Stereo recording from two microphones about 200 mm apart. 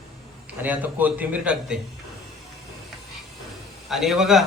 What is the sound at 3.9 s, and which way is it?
Speech, centre (ahead or behind).